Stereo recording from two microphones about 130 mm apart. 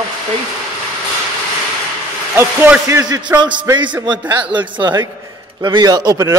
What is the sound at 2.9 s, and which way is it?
Speech, 30° right (ahead or behind).